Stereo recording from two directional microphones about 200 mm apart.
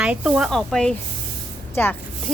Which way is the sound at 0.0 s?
5° right (ahead or behind).